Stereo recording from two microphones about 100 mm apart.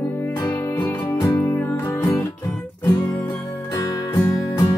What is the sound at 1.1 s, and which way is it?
Music, 35° left (ahead or behind).